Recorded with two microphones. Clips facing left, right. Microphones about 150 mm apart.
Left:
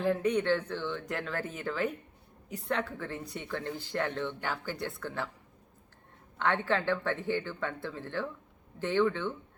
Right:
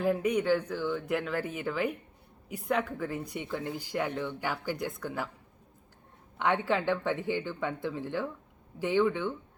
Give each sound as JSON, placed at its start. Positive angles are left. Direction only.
{"t": 0.0, "sound": "speech", "side_deg": -10}
{"t": 6.4, "sound": "speech", "side_deg": -15}